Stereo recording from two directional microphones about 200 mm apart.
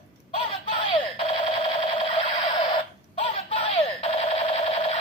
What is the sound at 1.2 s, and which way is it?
Alarm clock, 25° left (ahead or behind).